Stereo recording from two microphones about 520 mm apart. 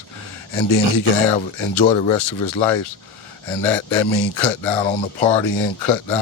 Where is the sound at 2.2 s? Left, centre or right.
Left.